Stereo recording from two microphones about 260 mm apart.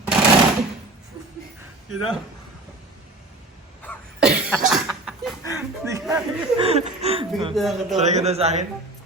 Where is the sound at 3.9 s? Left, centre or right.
Centre.